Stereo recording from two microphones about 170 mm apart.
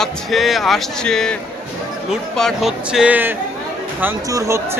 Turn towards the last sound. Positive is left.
turn(degrees=-15)  # may be behind; listen again after turning